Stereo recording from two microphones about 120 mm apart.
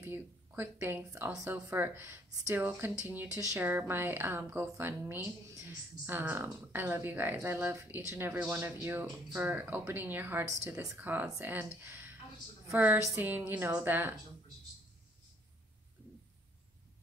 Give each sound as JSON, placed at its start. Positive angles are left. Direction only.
{"t": 0.0, "sound": "a woman's voice", "side_deg": -20}
{"t": 11.0, "sound": "speech", "side_deg": -15}